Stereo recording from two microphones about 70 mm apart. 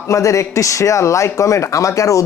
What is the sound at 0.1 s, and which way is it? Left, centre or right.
A man's voice, left.